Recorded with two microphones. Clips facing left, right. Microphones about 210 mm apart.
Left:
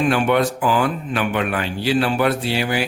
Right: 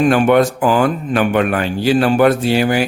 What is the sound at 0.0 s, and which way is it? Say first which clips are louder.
A man's voice: right 6 dB; 45° right (ahead or behind).